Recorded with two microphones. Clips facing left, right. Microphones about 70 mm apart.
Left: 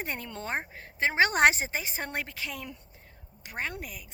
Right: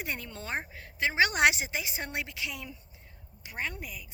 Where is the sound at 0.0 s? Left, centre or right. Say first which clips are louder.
Left 2 dB; left.